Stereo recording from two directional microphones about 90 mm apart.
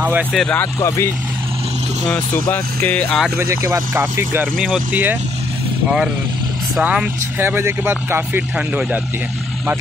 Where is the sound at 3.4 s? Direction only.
35° right (ahead or behind).